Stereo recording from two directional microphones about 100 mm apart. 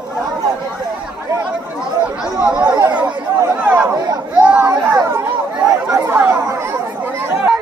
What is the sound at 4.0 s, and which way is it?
Chatter, 40° right (ahead or behind).